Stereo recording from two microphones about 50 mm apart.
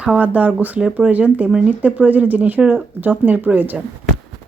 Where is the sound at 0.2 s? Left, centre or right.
Right.